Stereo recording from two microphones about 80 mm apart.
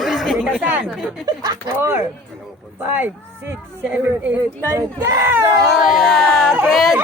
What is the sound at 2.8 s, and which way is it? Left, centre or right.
Speech, right.